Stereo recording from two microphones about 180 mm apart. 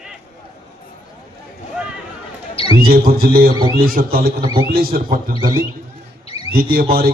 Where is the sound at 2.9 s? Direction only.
55° right (ahead or behind).